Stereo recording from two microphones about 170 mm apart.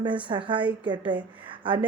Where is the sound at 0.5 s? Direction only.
10° right (ahead or behind).